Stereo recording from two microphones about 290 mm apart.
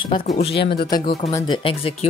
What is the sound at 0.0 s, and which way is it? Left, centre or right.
Speech, centre.